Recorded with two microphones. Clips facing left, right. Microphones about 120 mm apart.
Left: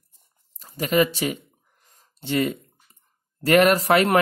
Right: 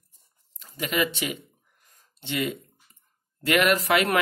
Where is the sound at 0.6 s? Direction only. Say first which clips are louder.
Left 6 dB; 40° left (ahead or behind).